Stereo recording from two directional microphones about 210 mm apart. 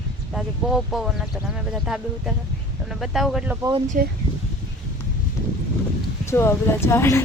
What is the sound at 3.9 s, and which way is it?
Speech, 40° right (ahead or behind).